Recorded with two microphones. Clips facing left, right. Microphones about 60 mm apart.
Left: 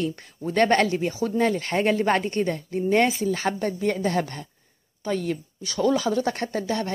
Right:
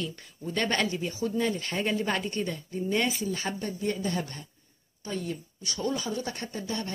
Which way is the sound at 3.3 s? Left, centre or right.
Left.